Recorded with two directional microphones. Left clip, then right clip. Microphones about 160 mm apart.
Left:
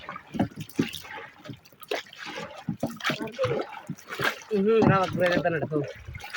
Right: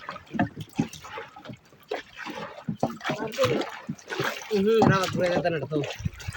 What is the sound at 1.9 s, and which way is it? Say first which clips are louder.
Water: left 1 dB; 40° left (ahead or behind).